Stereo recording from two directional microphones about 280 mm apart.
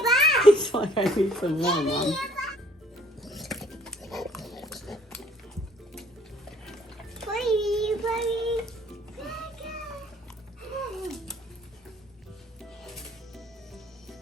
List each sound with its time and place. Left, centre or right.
0.0 s a sound: centre
0.6 s a sound: centre
1.0 s a child's voice: centre
3.2 s pig: centre
7.2 s child singing: centre
9.2 s music: centre
10.9 s cat: centre
12.8 s music: centre